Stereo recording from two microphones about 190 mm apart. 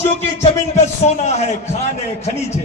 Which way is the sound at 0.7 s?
35° left (ahead or behind).